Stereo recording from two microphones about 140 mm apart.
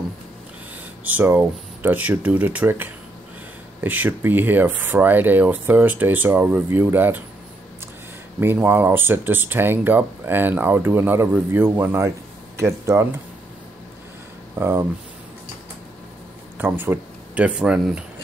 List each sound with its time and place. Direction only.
1.0 s speech: 15° right (ahead or behind)
8.4 s speech: 15° right (ahead or behind)
14.5 s speech: 20° right (ahead or behind)
16.5 s speech: 15° right (ahead or behind)